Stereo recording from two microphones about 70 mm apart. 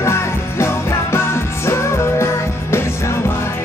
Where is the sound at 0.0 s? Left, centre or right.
Left.